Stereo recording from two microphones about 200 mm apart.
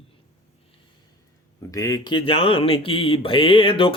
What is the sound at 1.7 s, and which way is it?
Speech, 20° left (ahead or behind).